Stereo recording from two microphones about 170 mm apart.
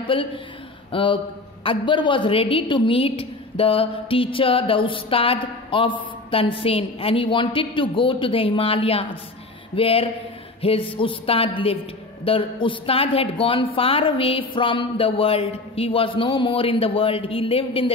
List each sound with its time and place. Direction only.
0.0 s a man's voice: 30° left (ahead or behind)